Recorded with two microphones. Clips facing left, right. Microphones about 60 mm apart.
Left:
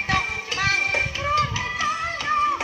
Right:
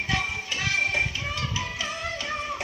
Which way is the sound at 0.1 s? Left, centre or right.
Left.